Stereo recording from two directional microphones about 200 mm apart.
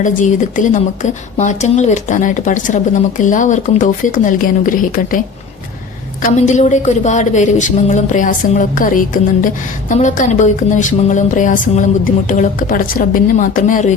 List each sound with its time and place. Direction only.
0.0 s speech: 40° left (ahead or behind)
6.2 s speech: 35° left (ahead or behind)